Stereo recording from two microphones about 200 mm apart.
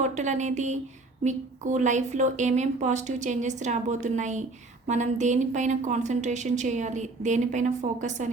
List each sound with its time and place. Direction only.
0.0 s a woman's voice: 35° right (ahead or behind)